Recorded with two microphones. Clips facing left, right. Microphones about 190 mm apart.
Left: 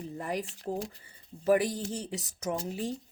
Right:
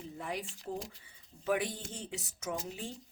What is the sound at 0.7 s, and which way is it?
Speech, 55° left (ahead or behind).